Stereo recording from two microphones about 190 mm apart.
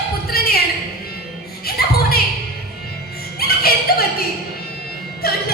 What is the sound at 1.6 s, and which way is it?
Music, 55° left (ahead or behind).